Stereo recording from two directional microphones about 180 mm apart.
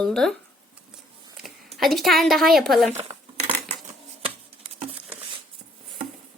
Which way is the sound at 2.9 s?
35° right (ahead or behind).